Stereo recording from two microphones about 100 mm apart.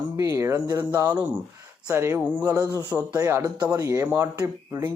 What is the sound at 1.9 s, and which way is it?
Speech, 25° right (ahead or behind).